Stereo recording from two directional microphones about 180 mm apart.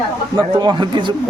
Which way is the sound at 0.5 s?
25° right (ahead or behind).